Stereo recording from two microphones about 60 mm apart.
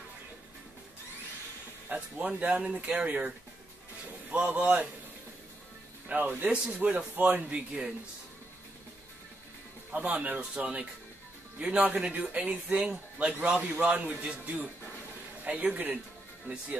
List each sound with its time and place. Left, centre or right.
2.0 s a man's voice: right
6.0 s a man's voice: right
7.5 s speech: centre
9.8 s a man's voice: right
15.4 s a man's voice: right